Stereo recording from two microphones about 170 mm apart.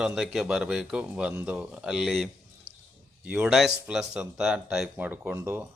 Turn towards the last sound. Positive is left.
turn(degrees=-15)  # may be behind; listen again after turning